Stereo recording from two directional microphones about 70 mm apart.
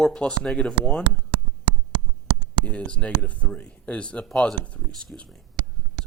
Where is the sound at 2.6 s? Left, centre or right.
Centre.